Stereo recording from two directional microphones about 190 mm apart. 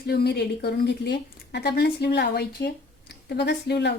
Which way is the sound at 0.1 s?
55° left (ahead or behind).